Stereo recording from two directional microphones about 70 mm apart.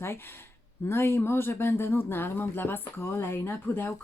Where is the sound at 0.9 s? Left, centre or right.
Left.